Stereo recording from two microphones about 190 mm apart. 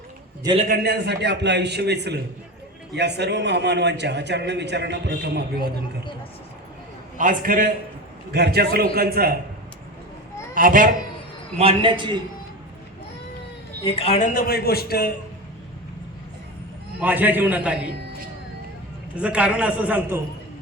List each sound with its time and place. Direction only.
0.7 s a man's voice: 55° right (ahead or behind)
7.2 s a man's voice: 45° right (ahead or behind)
8.3 s a man's voice: 55° right (ahead or behind)
10.5 s a child's voice: 45° right (ahead or behind)
11.5 s a man's voice: 30° right (ahead or behind)
13.8 s a woman's voice: 30° left (ahead or behind)
14.3 s a man's voice: 55° left (ahead or behind)
17.0 s a man's voice: 10° right (ahead or behind)
19.1 s a man's voice: 5° right (ahead or behind)